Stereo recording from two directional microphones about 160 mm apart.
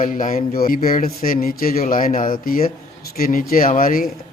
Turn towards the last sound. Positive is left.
turn(degrees=60)  # may be behind; listen again after turning